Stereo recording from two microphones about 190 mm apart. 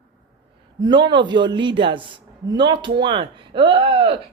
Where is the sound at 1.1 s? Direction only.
25° right (ahead or behind).